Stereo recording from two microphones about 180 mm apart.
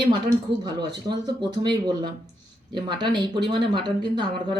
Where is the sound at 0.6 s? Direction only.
25° right (ahead or behind).